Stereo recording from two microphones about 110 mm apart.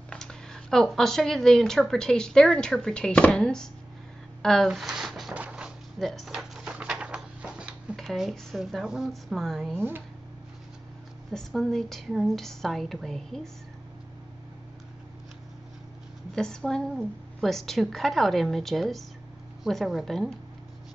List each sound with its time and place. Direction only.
0.1 s speech: 5° left (ahead or behind)
5.4 s music: 10° right (ahead or behind)
5.9 s drawer open or close: centre (ahead or behind)
8.0 s speech: centre (ahead or behind)
9.8 s speech: 20° right (ahead or behind)
11.3 s speech: 5° left (ahead or behind)
16.3 s speech: 5° left (ahead or behind)